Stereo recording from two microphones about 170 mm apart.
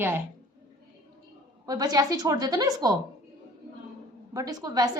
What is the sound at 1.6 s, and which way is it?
A woman's voice, 20° right (ahead or behind).